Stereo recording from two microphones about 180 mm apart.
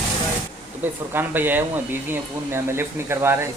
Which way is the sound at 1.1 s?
10° right (ahead or behind).